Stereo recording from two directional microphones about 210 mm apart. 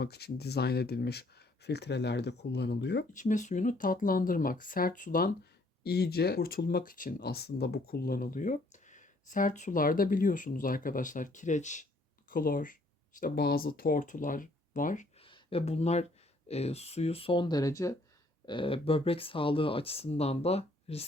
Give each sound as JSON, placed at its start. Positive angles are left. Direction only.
{"t": 0.0, "sound": "speech", "side_deg": 50}
{"t": 3.1, "sound": "speech", "side_deg": 35}
{"t": 15.2, "sound": "speech", "side_deg": 25}